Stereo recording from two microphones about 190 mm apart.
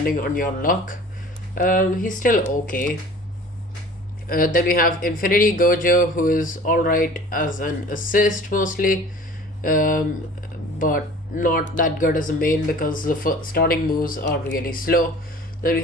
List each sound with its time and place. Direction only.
0.0 s speech: 50° left (ahead or behind)
4.3 s speech: 45° left (ahead or behind)